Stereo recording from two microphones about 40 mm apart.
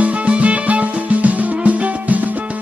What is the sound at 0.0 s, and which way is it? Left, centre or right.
Music, right.